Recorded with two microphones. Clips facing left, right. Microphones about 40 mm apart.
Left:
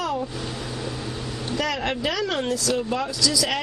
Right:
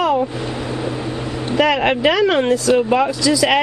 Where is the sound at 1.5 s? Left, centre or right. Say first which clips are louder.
Right 10 dB; right.